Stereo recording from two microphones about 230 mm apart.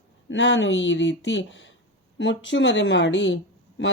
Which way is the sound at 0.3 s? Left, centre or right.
Left.